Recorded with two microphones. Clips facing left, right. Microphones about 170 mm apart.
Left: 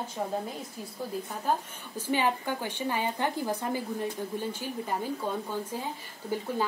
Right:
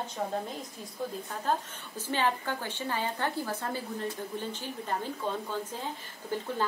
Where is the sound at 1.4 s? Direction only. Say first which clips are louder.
Even; 10° left (ahead or behind).